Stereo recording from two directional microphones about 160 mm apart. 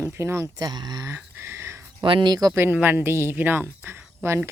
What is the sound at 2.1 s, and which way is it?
Speech, 30° right (ahead or behind).